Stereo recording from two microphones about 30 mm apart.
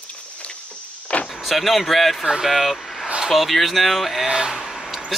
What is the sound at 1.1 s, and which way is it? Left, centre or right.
Vehicle, left.